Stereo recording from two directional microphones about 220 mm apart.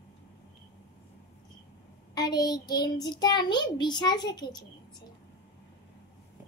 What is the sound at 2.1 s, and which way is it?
A child's voice, 20° left (ahead or behind).